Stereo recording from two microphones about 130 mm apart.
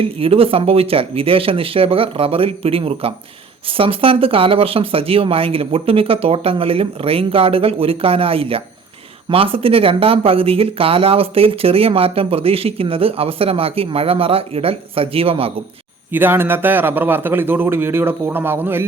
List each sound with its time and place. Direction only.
0.0 s speech: 45° right (ahead or behind)
16.1 s a man's voice: 15° right (ahead or behind)